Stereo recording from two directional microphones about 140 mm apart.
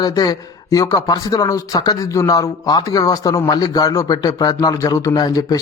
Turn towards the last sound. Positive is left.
turn(degrees=25)  # may be behind; listen again after turning